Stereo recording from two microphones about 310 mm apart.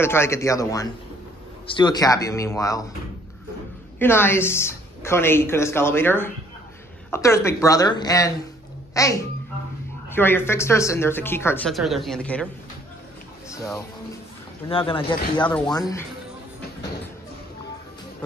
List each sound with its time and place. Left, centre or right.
0.0 s speech: centre
4.0 s speech: centre
13.5 s speech: centre
15.4 s speech: centre